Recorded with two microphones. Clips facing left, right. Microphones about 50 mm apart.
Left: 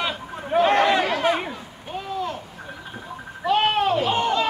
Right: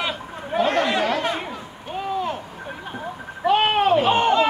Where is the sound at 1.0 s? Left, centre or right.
Centre.